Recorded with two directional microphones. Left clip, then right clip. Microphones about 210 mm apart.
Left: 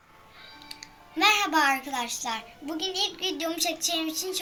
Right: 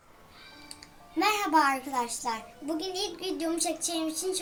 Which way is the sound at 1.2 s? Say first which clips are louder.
Left 2 dB; centre (ahead or behind).